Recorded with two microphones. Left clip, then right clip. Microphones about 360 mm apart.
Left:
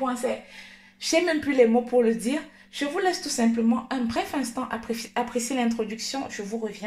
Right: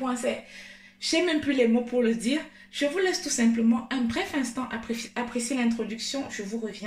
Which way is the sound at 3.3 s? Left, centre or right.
Centre.